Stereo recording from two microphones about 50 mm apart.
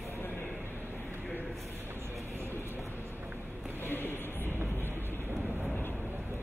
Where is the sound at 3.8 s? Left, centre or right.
Left.